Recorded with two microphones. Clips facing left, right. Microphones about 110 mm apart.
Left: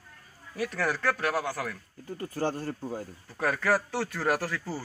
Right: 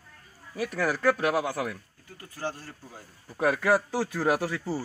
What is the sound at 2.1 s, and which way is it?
Speech, 40° left (ahead or behind).